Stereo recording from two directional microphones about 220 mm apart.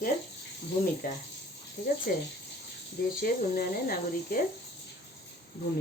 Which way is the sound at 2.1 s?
40° left (ahead or behind).